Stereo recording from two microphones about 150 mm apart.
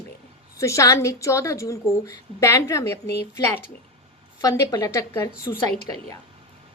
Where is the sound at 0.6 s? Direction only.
20° left (ahead or behind).